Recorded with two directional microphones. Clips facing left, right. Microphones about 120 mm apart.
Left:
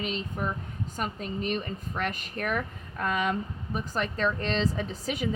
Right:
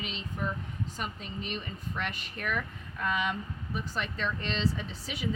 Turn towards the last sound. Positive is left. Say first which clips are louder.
# left 7 dB
turn(degrees=45)  # may be behind; listen again after turning